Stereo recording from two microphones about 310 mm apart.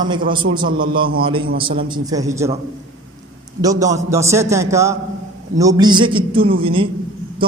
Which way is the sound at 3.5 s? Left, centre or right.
Centre.